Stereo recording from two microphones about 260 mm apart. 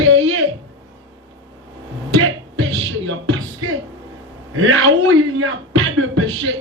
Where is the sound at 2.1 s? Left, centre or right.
Right.